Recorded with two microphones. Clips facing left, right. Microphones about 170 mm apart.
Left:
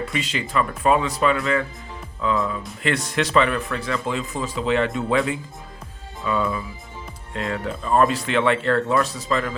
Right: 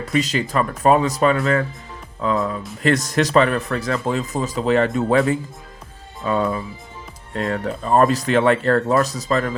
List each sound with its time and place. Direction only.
0.0 s speech: 40° right (ahead or behind)